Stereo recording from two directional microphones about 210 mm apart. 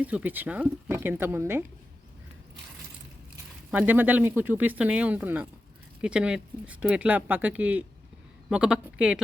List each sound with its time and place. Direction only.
0.0 s speech: 5° right (ahead or behind)
3.7 s speech: 10° right (ahead or behind)